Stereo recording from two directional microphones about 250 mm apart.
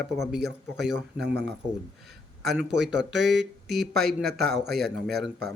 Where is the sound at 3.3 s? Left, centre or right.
Centre.